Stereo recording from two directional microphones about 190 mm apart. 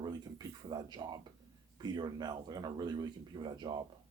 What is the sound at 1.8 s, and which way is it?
Speech, 20° right (ahead or behind).